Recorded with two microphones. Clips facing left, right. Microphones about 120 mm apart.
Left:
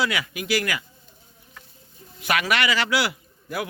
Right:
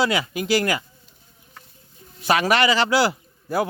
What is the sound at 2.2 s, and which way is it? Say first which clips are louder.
A man's voice: right 5 dB; 30° right (ahead or behind).